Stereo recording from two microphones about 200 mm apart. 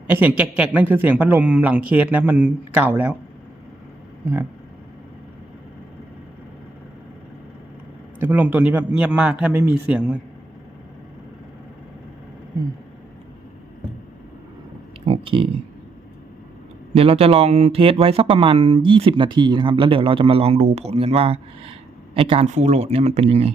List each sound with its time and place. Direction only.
0.1 s a man's voice: 10° right (ahead or behind)
8.2 s a man's voice: 10° right (ahead or behind)
15.0 s a sound: 25° right (ahead or behind)
16.9 s speech: 30° right (ahead or behind)